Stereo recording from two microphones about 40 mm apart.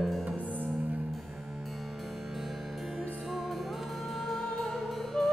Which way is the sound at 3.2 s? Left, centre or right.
Centre.